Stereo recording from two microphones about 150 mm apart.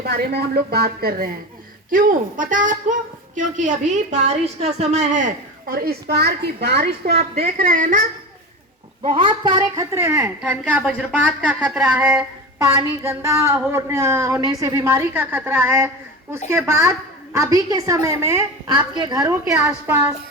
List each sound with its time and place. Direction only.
0.0 s a woman's voice: 90° right
1.9 s a woman's voice: 65° right (ahead or behind); by 7.2 s 90° right
7.3 s a woman's voice: 75° right (ahead or behind)
9.0 s a woman's voice: 35° right (ahead or behind); by 18.4 s 20° right (ahead or behind)
18.7 s a woman's voice: 30° right (ahead or behind)